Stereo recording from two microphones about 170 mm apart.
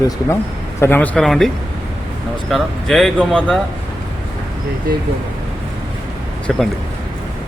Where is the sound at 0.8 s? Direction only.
10° left (ahead or behind).